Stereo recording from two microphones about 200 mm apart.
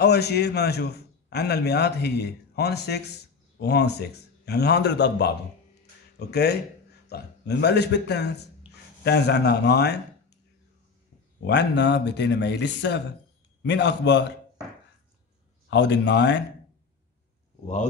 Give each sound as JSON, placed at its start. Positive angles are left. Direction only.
{"t": 0.0, "sound": "a man's voice", "side_deg": 55}
{"t": 11.4, "sound": "a man's voice", "side_deg": 60}
{"t": 15.7, "sound": "a man's voice", "side_deg": 60}